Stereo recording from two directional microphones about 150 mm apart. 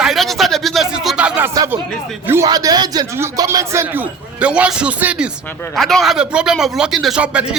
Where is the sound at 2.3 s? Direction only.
20° right (ahead or behind).